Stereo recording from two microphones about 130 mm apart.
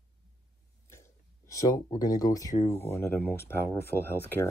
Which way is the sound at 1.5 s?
25° left (ahead or behind).